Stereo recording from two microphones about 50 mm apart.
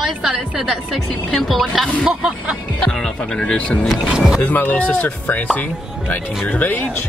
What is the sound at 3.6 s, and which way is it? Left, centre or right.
Speech, left.